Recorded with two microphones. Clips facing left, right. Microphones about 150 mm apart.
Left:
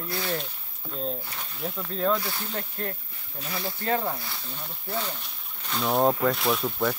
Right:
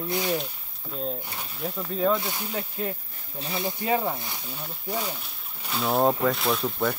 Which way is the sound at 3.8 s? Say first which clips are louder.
Right 1 dB; 10° right (ahead or behind).